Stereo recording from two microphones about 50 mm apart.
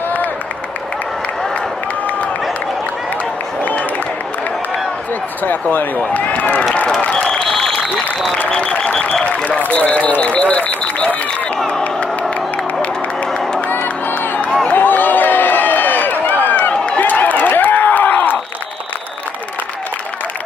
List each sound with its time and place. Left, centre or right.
5.4 s speech: left
7.1 s applause: centre
8.5 s speech: left
11.8 s crowd: left
13.7 s crowd: left
14.7 s a sound: left
16.7 s run: left
17.0 s crowd: left